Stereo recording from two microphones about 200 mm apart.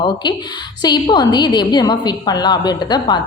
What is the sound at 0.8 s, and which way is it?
A woman's voice, 20° left (ahead or behind).